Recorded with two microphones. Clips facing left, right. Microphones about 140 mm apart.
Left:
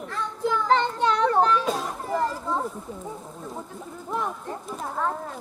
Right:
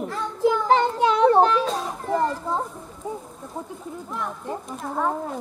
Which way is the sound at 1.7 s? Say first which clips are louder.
Right 1 dB; 5° left (ahead or behind).